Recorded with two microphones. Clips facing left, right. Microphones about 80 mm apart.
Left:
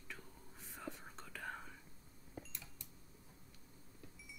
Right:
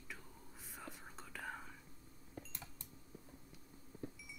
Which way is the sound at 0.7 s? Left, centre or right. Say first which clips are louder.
Left 3 dB; centre.